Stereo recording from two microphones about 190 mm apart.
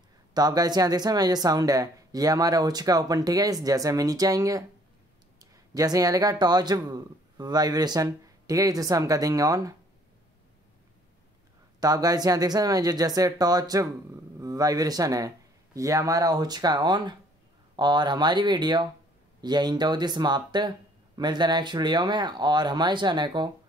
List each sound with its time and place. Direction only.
0.3 s speech: 20° right (ahead or behind)
11.8 s speech: 20° right (ahead or behind)